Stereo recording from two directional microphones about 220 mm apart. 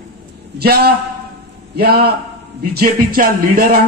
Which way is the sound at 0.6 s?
45° right (ahead or behind).